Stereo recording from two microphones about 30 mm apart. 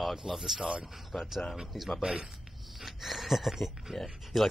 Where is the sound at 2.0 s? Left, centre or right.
Right.